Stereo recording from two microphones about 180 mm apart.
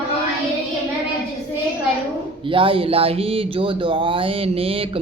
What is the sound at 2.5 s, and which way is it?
Speech, 30° right (ahead or behind).